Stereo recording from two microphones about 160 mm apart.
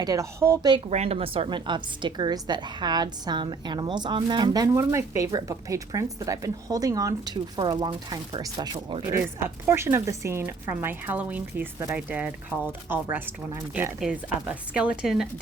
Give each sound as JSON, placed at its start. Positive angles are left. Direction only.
{"t": 0.0, "sound": "a woman's voice", "side_deg": -20}
{"t": 0.9, "sound": "a woman's voice", "side_deg": -40}